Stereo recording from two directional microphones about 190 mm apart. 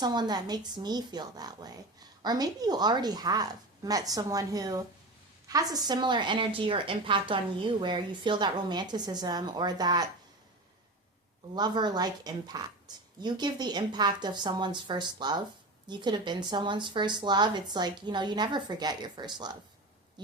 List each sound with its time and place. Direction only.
0.0 s a woman's voice: 20° right (ahead or behind)
11.5 s a woman's voice: 20° right (ahead or behind)
20.2 s a sound: 25° right (ahead or behind)